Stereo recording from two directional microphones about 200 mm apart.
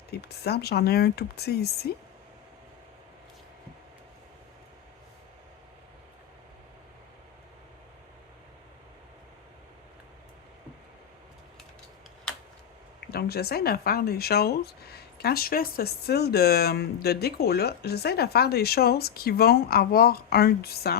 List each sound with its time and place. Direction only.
0.1 s speech: 55° left (ahead or behind)
13.1 s speech: 50° left (ahead or behind)